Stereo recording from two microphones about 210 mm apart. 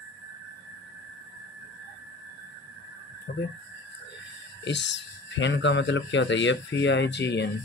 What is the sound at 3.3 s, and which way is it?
Speech, 55° left (ahead or behind).